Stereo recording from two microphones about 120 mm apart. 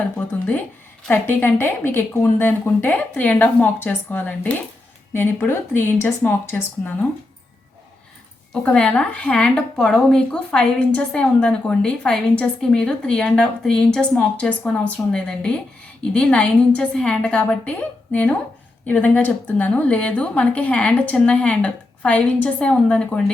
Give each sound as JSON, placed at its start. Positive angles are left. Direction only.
{"t": 1.1, "sound": "speech", "side_deg": 15}
{"t": 8.6, "sound": "speech", "side_deg": 10}